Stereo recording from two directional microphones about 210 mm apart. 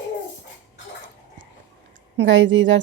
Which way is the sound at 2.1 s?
60° right (ahead or behind).